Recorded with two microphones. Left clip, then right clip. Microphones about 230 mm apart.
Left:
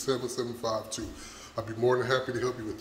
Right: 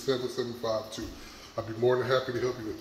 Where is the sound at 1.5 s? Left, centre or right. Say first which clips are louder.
Even; centre.